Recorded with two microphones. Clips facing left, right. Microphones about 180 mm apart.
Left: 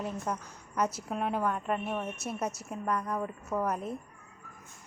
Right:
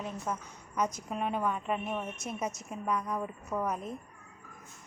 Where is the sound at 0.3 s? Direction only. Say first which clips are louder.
Left 1 dB; 5° right (ahead or behind).